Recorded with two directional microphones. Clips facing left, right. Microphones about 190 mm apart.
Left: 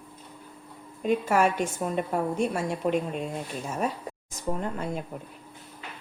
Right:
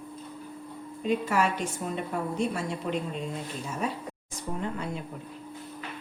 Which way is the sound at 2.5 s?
50° left (ahead or behind).